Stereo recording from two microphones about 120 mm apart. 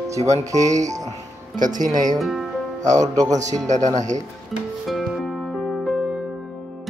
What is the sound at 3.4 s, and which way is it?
Speech, 85° right.